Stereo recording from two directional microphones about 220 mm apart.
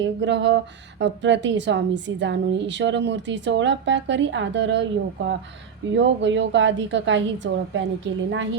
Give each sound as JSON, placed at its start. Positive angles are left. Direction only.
{"t": 0.0, "sound": "speech", "side_deg": -55}
{"t": 6.0, "sound": "speech", "side_deg": -55}